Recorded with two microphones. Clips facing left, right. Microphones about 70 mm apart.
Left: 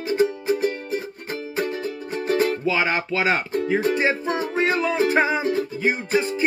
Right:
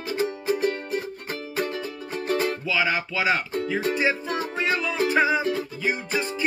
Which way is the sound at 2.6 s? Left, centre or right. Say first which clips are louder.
Left 3 dB; left.